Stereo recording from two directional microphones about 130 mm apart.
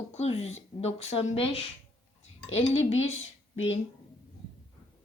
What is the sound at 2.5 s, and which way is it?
Speech, 55° left (ahead or behind).